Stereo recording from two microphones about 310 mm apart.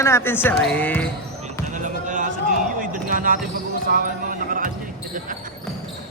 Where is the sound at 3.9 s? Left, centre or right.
Right.